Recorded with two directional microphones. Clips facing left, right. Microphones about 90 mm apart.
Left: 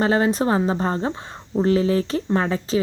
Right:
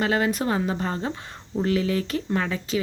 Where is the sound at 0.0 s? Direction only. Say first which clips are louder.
Left 4 dB; 30° left (ahead or behind).